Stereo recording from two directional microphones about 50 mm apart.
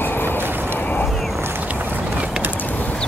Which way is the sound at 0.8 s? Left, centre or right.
Left.